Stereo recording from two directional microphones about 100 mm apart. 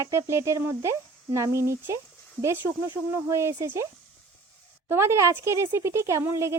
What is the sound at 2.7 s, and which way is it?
Speech, 50° right (ahead or behind).